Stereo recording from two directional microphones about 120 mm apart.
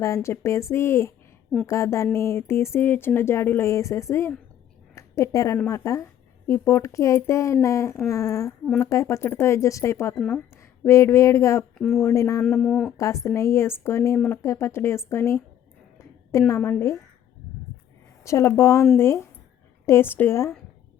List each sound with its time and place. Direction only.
0.0 s speech: 25° left (ahead or behind)
4.9 s a sound: 25° left (ahead or behind)
5.6 s speech: 25° left (ahead or behind)
10.2 s speech: centre (ahead or behind)
10.8 s speech: 25° left (ahead or behind)
11.8 s speech: 5° left (ahead or behind)
12.0 s speech: 25° left (ahead or behind)
12.5 s speech: 5° left (ahead or behind)
13.0 s speech: 25° left (ahead or behind)
18.2 s speech: 25° left (ahead or behind)